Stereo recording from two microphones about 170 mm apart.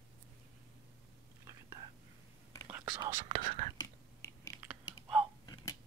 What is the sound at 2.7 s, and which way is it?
Whispering, 10° right (ahead or behind).